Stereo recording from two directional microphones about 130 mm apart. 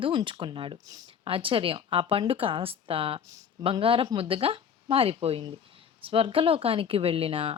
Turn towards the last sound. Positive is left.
turn(degrees=-45)  # may be behind; listen again after turning